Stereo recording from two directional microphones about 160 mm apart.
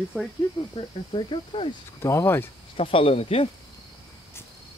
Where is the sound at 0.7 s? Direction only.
30° left (ahead or behind).